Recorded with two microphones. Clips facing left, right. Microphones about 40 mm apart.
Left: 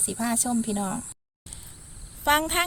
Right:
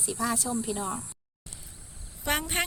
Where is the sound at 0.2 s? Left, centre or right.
Left.